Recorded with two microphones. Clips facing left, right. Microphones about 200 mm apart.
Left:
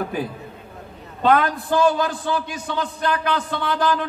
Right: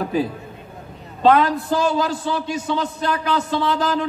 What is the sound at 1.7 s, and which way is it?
A man's voice, 55° left (ahead or behind).